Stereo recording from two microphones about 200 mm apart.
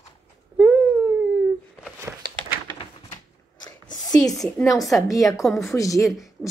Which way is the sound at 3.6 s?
20° left (ahead or behind).